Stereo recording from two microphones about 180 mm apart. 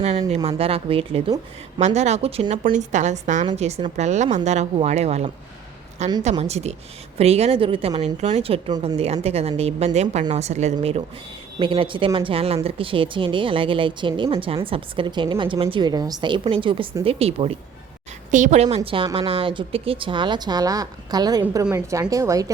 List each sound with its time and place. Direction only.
0.0 s a woman's voice: 35° right (ahead or behind); by 22.5 s 20° right (ahead or behind)